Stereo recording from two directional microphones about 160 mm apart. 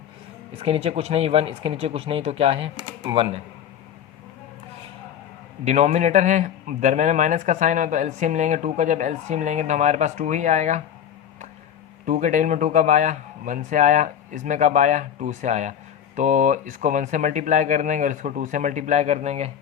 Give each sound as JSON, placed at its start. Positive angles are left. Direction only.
{"t": 0.6, "sound": "speech", "side_deg": -40}
{"t": 5.6, "sound": "speech", "side_deg": -45}
{"t": 12.0, "sound": "speech", "side_deg": -50}